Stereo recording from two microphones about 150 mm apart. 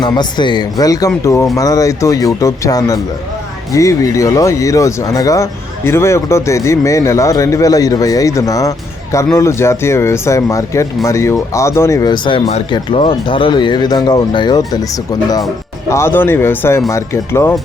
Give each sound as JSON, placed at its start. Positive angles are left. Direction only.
{"t": 0.0, "sound": "speech", "side_deg": 30}
{"t": 15.9, "sound": "speech", "side_deg": 15}